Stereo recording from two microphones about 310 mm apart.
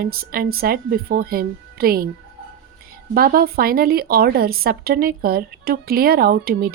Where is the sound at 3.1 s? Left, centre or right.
Right.